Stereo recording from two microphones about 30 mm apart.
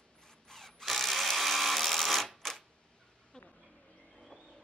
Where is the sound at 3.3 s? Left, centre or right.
Left.